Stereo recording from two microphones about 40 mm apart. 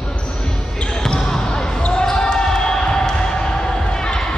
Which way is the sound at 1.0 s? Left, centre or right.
Centre.